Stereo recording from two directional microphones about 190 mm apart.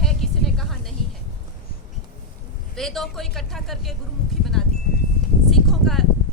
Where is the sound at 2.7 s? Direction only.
Centre (ahead or behind).